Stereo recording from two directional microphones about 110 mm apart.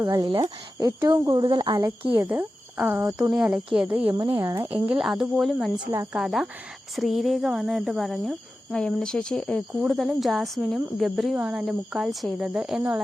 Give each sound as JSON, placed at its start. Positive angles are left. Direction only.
{"t": 0.2, "sound": "speech", "side_deg": -40}
{"t": 0.4, "sound": "speech", "side_deg": -25}
{"t": 0.9, "sound": "speech", "side_deg": -35}
{"t": 2.1, "sound": "speech", "side_deg": -20}
{"t": 3.2, "sound": "speech", "side_deg": -10}
{"t": 4.4, "sound": "speech", "side_deg": -30}
{"t": 4.6, "sound": "speech", "side_deg": -55}
{"t": 4.9, "sound": "speech", "side_deg": 0}